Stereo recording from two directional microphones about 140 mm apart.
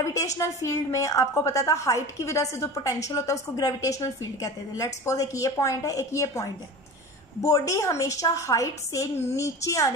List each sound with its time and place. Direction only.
0.0 s a woman's voice: 25° left (ahead or behind)